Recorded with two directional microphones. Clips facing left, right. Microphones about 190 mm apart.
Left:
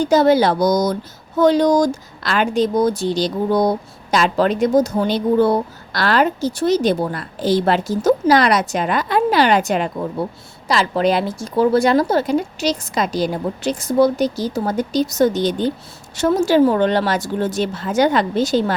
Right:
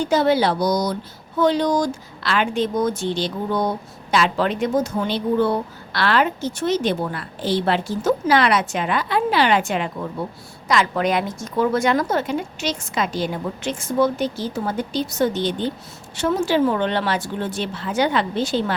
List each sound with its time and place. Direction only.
0.0 s speech: 40° left (ahead or behind)